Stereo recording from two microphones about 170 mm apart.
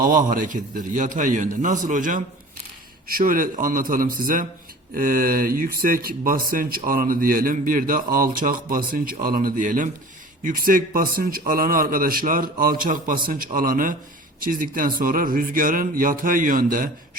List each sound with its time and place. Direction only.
0.2 s a man's voice: 50° right (ahead or behind)